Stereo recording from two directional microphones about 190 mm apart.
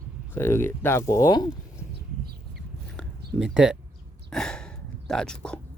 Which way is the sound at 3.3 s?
5° right (ahead or behind).